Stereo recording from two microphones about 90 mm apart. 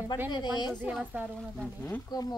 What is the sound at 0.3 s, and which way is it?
Speech, 55° left (ahead or behind).